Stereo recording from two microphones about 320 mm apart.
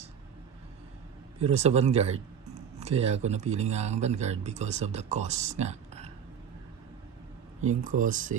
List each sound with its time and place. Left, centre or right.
1.4 s speech: centre
7.6 s speech: right